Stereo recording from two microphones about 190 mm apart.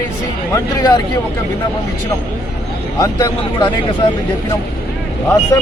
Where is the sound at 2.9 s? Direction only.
20° left (ahead or behind).